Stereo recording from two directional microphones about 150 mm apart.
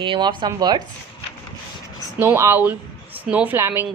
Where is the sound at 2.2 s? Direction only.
15° right (ahead or behind).